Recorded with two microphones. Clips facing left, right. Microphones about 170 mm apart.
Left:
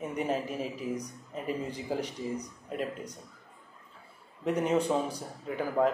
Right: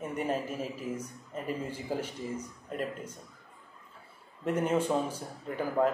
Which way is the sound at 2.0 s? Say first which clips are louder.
Left 2 dB; 35° left (ahead or behind).